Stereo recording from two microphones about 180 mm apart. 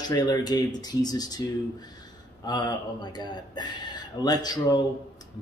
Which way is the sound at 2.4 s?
25° left (ahead or behind).